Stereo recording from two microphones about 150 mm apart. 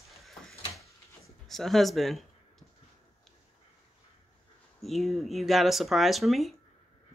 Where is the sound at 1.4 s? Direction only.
Centre (ahead or behind).